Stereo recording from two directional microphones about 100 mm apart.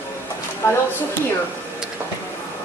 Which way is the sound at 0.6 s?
30° left (ahead or behind).